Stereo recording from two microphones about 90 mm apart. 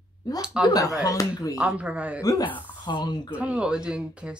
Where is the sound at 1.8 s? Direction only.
15° right (ahead or behind).